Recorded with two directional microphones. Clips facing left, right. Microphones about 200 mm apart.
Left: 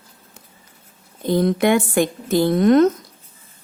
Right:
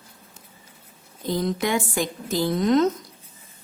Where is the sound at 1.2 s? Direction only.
60° left (ahead or behind).